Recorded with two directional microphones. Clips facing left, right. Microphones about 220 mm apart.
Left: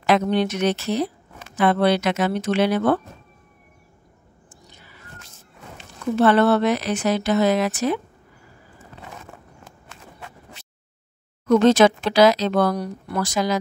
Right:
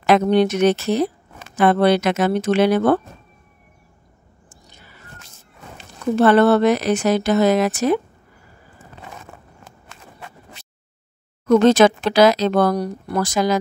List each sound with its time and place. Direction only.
0.0 s speech: 50° right (ahead or behind)
4.5 s a sound: 45° right (ahead or behind)
5.8 s speech: 45° right (ahead or behind)
11.4 s speech: 50° right (ahead or behind)